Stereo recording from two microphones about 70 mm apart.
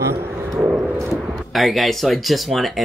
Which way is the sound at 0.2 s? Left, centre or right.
Right.